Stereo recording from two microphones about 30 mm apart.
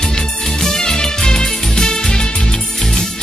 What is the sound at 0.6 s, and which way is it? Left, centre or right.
Music, centre.